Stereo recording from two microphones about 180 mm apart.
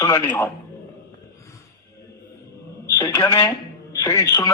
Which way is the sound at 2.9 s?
15° left (ahead or behind).